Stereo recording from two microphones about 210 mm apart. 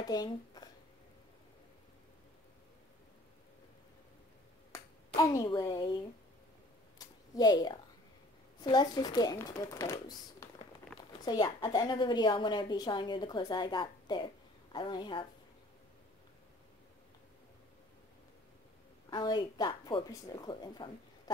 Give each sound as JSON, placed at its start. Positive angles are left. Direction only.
{"t": 0.0, "sound": "speech", "side_deg": 20}
{"t": 4.7, "sound": "speech", "side_deg": 15}
{"t": 7.0, "sound": "a sound", "side_deg": 20}
{"t": 8.5, "sound": "a woman's voice", "side_deg": 20}
{"t": 19.0, "sound": "a woman's voice", "side_deg": 20}